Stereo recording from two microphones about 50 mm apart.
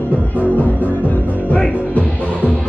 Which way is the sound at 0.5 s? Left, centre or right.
Left.